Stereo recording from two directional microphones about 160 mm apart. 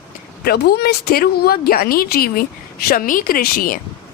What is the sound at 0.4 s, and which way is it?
A woman's voice, 85° left.